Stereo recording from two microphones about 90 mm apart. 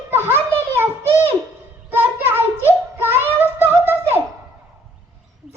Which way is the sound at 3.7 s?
25° right (ahead or behind).